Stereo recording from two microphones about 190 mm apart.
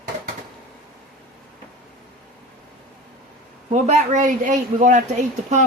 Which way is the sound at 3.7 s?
40° right (ahead or behind).